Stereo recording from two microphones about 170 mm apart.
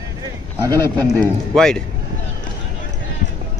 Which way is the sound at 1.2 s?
5° left (ahead or behind).